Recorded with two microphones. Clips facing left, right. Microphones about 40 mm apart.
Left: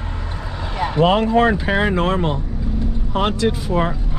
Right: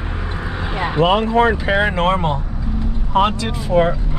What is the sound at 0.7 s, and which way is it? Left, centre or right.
Vehicle, right.